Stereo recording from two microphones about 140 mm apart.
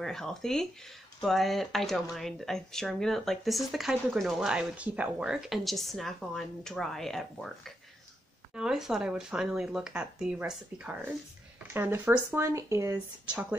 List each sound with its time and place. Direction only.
0.0 s speech: 5° left (ahead or behind); by 13.0 s 20° right (ahead or behind)
13.3 s speech: 10° right (ahead or behind)